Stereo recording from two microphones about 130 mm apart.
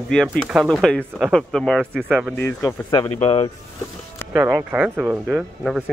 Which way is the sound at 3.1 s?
50° left (ahead or behind).